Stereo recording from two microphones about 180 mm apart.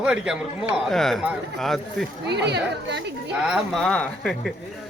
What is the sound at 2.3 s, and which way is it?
Speech, 70° right (ahead or behind).